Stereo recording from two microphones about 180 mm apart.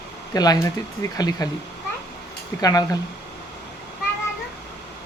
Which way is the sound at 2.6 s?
20° left (ahead or behind).